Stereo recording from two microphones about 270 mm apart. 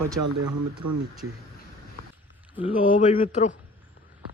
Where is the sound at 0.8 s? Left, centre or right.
Right.